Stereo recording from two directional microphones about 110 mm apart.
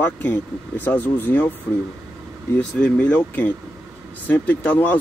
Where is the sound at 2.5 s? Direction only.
10° left (ahead or behind).